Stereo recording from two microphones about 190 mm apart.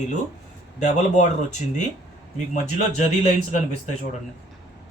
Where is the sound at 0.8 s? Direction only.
40° left (ahead or behind).